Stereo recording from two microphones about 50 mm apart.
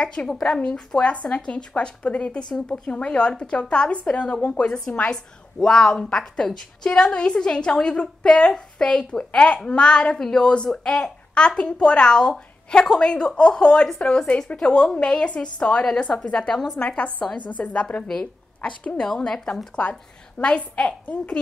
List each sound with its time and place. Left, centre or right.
0.0 s a woman's voice: centre
5.1 s a child's voice: centre
16.7 s a woman's voice: left
18.9 s a child's voice: centre
19.7 s a woman's voice: left